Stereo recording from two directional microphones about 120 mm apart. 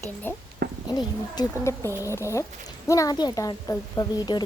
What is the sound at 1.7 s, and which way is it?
Speech, 25° left (ahead or behind).